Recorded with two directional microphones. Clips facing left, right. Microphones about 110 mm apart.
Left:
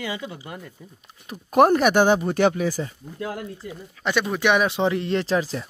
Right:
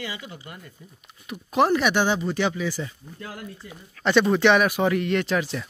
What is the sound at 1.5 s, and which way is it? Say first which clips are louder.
Speech: left 4 dB; 50° left (ahead or behind).